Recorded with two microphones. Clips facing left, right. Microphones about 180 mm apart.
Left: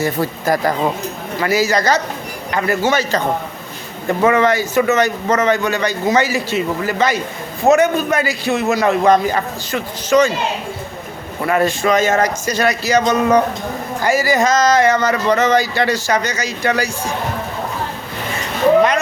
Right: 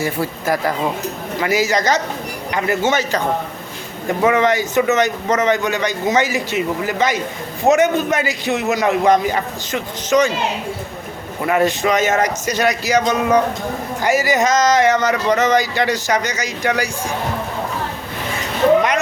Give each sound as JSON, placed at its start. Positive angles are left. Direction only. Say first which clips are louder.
{"t": 0.0, "sound": "speech", "louder": "left 2 dB", "side_deg": -10}
{"t": 1.4, "sound": "a man's voice", "louder": "left 1 dB", "side_deg": -15}
{"t": 4.3, "sound": "a man's voice", "louder": "left 1 dB", "side_deg": -15}
{"t": 11.4, "sound": "a man's voice", "louder": "left 1 dB", "side_deg": -15}